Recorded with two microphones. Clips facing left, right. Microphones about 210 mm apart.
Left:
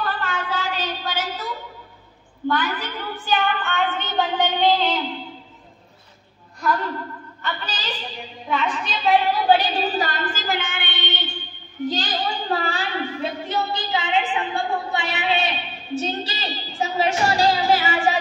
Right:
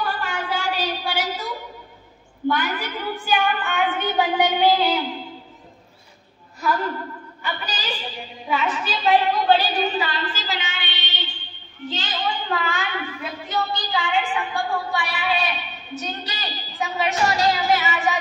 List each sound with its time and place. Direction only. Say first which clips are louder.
0.0 s a sound: even; 10° right (ahead or behind)
2.4 s a woman's voice: even; 10° right (ahead or behind)
6.6 s a woman's voice: even; 5° right (ahead or behind)
9.7 s a woman's voice: even; 30° left (ahead or behind); by 11.4 s 50° left (ahead or behind)
11.9 s a woman's voice: right 1 dB; 35° left (ahead or behind)